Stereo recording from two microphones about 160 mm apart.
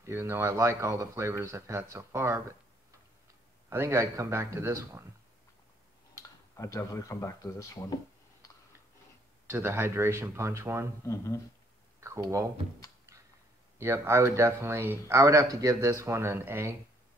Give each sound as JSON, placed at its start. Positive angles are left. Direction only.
{"t": 0.0, "sound": "a man's voice", "side_deg": -15}
{"t": 3.7, "sound": "a man's voice", "side_deg": -15}
{"t": 6.1, "sound": "speech", "side_deg": 20}
{"t": 9.5, "sound": "a man's voice", "side_deg": -15}
{"t": 11.1, "sound": "speech", "side_deg": 20}
{"t": 12.0, "sound": "speech", "side_deg": -20}
{"t": 13.7, "sound": "a man's voice", "side_deg": -15}